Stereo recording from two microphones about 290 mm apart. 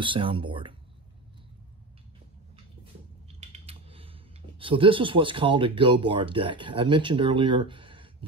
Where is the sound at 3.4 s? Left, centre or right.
Centre.